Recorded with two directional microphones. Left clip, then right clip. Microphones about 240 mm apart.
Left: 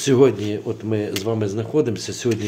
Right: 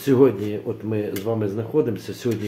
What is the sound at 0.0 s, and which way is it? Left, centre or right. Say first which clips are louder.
Speech: left 1 dB; left.